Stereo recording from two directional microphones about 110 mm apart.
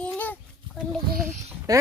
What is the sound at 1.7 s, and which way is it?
Speech, 35° right (ahead or behind).